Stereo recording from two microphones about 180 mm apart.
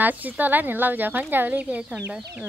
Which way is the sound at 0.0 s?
10° right (ahead or behind).